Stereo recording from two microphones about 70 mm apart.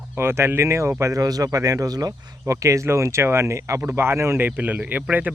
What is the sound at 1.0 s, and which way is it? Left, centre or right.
Speech, right.